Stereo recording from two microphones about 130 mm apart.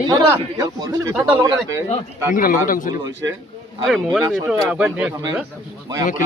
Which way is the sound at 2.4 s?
90° left.